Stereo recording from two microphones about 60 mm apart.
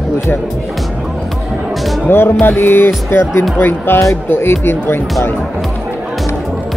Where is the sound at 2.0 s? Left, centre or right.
Left.